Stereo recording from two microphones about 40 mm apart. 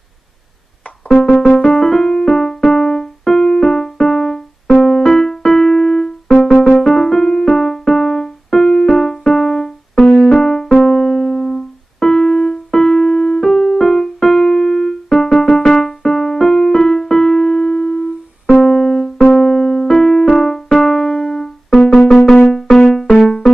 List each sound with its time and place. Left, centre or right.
1.0 s music: centre
1.6 s music: centre
10.8 s keyboard: centre
15.7 s music: centre
18.6 s keyboard: centre
19.3 s music: centre